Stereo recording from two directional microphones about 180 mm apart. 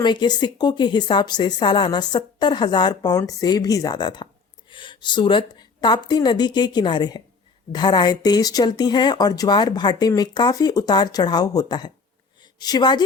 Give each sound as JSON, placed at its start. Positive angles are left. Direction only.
{"t": 0.0, "sound": "a woman's voice", "side_deg": 25}